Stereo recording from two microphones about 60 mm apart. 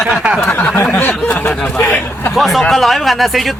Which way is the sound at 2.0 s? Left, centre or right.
Left.